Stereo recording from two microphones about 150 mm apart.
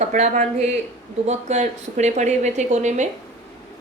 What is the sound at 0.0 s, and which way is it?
A woman's voice, 55° right (ahead or behind).